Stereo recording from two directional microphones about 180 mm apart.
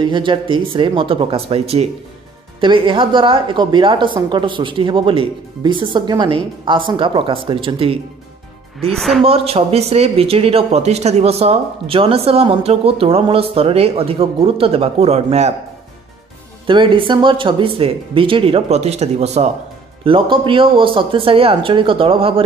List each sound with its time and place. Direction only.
0.0 s speech: 25° right (ahead or behind)
8.8 s a woman's voice: centre (ahead or behind)
9.2 s speech: 35° right (ahead or behind)
16.6 s speech: 30° right (ahead or behind)